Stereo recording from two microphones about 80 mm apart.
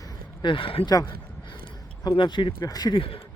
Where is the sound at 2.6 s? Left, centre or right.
Left.